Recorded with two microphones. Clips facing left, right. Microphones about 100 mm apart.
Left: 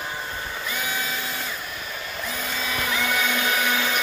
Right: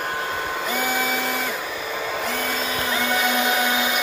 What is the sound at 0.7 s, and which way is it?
Printer, 60° right (ahead or behind).